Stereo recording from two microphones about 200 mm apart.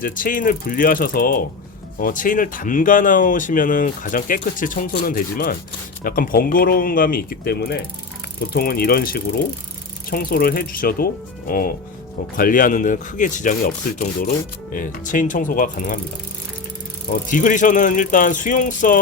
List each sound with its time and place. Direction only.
0.0 s speech: 45° left (ahead or behind)
17.1 s speech: 40° left (ahead or behind)